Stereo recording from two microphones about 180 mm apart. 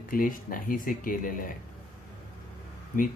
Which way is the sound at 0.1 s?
50° left (ahead or behind).